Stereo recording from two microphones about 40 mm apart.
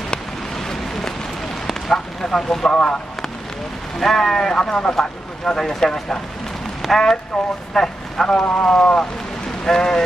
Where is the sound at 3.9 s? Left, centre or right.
Centre.